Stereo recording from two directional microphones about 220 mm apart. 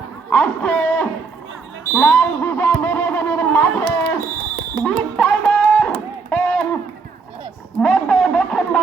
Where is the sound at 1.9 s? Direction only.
10° left (ahead or behind).